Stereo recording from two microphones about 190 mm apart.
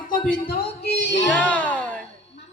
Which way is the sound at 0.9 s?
65° left (ahead or behind).